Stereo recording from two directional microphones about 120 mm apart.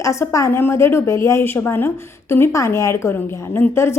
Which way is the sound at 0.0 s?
25° left (ahead or behind).